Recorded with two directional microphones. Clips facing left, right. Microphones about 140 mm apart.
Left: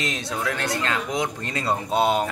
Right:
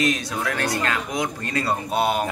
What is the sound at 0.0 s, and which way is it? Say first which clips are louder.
Speech: right 4 dB; 25° left (ahead or behind).